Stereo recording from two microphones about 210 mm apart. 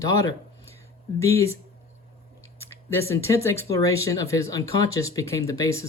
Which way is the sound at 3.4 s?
15° left (ahead or behind).